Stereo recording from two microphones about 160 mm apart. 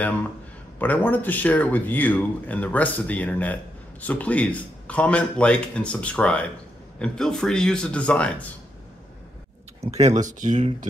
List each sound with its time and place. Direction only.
0.7 s speech: 10° left (ahead or behind)
9.8 s speech: 45° right (ahead or behind)